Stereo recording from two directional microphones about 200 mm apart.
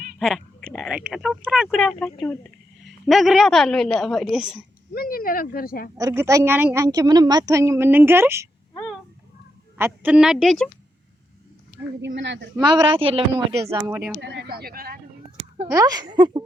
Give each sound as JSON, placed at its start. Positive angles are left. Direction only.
{"t": 0.2, "sound": "a sound", "side_deg": 0}
{"t": 0.8, "sound": "a woman's voice", "side_deg": -5}
{"t": 4.9, "sound": "speech", "side_deg": 45}
{"t": 6.0, "sound": "a woman's voice", "side_deg": -15}
{"t": 9.7, "sound": "a woman's voice", "side_deg": -10}
{"t": 12.0, "sound": "a woman's voice", "side_deg": -60}
{"t": 12.6, "sound": "a woman's voice", "side_deg": -25}
{"t": 13.7, "sound": "a woman's voice", "side_deg": -15}
{"t": 14.2, "sound": "a sound", "side_deg": -60}
{"t": 15.7, "sound": "a woman's voice", "side_deg": -20}